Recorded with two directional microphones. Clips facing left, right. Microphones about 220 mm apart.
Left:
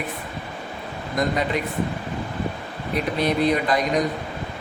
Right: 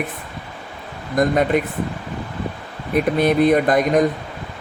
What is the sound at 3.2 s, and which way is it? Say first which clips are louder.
Speech: right 5 dB; 50° right (ahead or behind).